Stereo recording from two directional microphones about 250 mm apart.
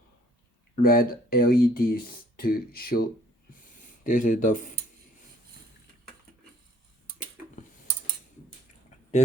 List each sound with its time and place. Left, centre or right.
0.8 s speech: left